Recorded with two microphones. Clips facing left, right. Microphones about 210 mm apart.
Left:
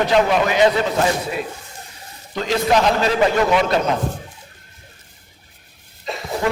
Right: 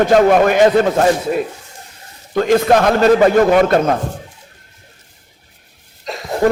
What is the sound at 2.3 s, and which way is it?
A man's voice, 55° right (ahead or behind).